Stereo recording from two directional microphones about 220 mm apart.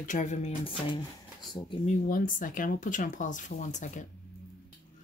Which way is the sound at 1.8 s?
35° left (ahead or behind).